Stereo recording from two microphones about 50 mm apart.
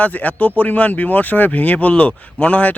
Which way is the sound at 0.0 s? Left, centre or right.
Left.